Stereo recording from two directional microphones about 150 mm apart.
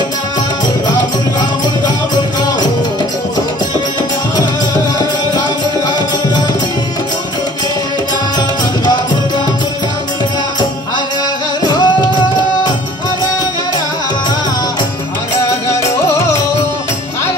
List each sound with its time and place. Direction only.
11.6 s music: 30° left (ahead or behind)
15.7 s music: 20° left (ahead or behind)